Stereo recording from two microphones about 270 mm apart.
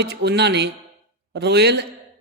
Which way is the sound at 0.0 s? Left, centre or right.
Right.